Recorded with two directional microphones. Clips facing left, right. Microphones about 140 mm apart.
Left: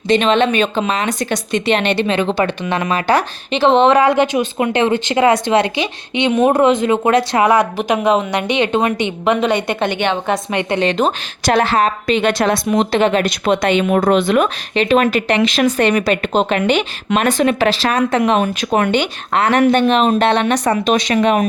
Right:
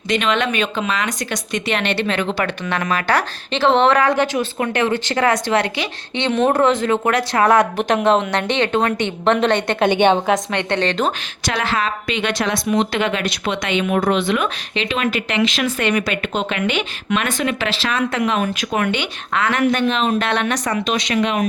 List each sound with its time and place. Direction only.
0.1 s speech: 30° left (ahead or behind)
7.4 s a woman's voice: 5° left (ahead or behind)
9.9 s a woman's voice: 20° right (ahead or behind)
10.2 s a woman's voice: 10° left (ahead or behind)
11.4 s a woman's voice: 50° left (ahead or behind)
20.2 s speech: 30° left (ahead or behind)
20.8 s speech: 45° left (ahead or behind)